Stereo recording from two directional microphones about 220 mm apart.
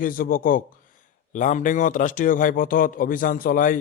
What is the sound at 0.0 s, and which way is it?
A man's voice, 40° left (ahead or behind).